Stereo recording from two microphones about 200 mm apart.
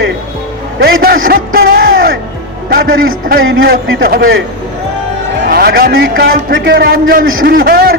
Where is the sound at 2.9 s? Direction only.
90° right.